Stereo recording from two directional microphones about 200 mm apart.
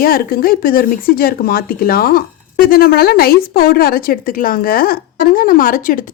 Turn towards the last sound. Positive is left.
turn(degrees=45)  # may be behind; listen again after turning